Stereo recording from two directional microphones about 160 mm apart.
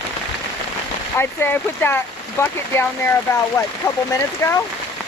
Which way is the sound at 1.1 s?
15° left (ahead or behind).